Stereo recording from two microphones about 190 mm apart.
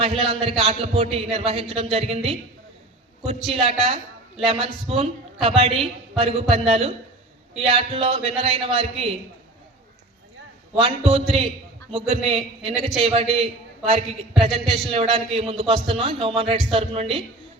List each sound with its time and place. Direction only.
0.0 s a man's voice: 30° right (ahead or behind)
10.8 s a man's voice: 30° right (ahead or behind)